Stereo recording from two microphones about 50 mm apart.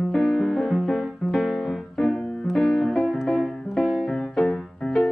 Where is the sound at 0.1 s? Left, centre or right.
Centre.